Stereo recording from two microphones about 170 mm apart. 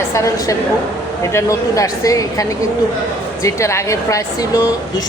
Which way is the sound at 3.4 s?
15° left (ahead or behind).